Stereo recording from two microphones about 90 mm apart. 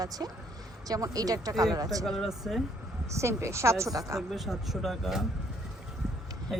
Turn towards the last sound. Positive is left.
turn(degrees=0)  # may be behind; listen again after turning